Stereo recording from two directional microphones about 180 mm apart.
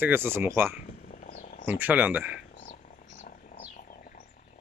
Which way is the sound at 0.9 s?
50° left (ahead or behind).